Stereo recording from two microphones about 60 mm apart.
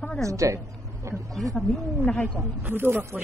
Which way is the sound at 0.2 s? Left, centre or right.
Right.